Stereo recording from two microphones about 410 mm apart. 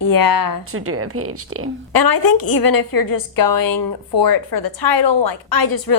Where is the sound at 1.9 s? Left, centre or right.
Left.